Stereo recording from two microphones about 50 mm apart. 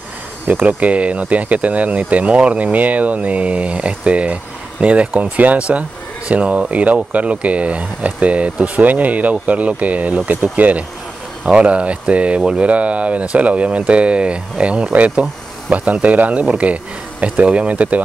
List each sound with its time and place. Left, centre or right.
0.5 s speech: right